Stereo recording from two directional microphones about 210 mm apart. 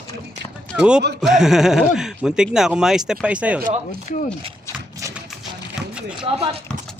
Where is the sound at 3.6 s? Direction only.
40° right (ahead or behind).